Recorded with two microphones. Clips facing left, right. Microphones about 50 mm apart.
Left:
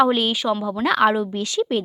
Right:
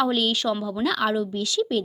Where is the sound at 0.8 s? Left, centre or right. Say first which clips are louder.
Left 6 dB; left.